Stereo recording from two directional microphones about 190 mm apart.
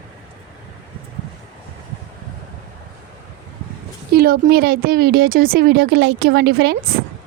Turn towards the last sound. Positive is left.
turn(degrees=-60)  # may be behind; listen again after turning